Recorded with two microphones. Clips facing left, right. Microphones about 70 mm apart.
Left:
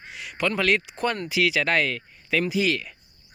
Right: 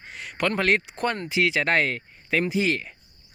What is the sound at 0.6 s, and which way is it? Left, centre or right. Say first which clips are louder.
Speech: even; right.